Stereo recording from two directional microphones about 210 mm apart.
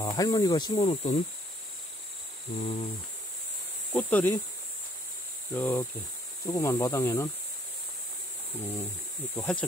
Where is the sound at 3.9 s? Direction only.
10° left (ahead or behind).